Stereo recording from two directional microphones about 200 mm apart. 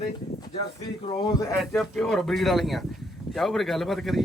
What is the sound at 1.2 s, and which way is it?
Speech, 20° left (ahead or behind).